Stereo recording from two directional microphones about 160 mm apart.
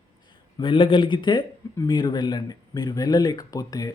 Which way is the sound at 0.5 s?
30° left (ahead or behind).